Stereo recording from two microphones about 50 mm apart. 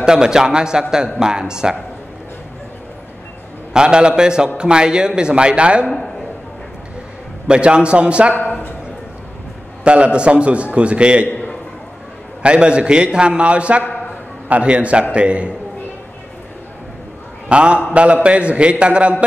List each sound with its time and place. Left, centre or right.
0.0 s speech: centre
3.7 s speech: centre
7.4 s a man's voice: centre
8.4 s a sound: left
9.8 s a man's voice: right
12.4 s a man's voice: centre
17.5 s a man's voice: right